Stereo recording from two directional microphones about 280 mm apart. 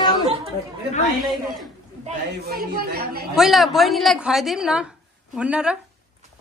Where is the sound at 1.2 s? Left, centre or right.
Centre.